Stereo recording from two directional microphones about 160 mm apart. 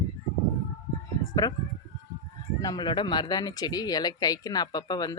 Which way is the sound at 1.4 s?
20° left (ahead or behind).